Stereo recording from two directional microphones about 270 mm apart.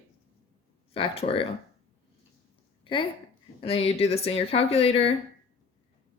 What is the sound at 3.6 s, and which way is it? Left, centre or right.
Speech, left.